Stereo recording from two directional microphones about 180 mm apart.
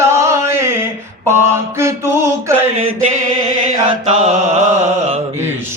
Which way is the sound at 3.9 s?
35° right (ahead or behind).